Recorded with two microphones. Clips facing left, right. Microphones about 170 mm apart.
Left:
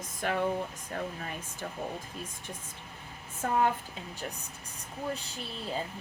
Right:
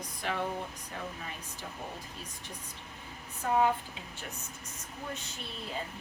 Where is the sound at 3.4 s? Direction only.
50° left (ahead or behind).